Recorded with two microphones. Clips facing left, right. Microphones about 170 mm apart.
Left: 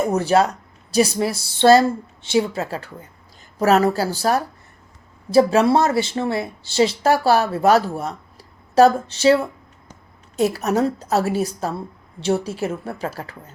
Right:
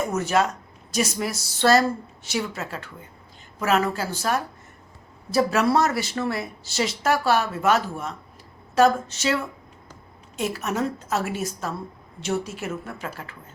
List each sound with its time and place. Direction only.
0.0 s speech: 35° left (ahead or behind)